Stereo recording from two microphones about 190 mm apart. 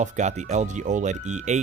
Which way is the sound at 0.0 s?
40° right (ahead or behind).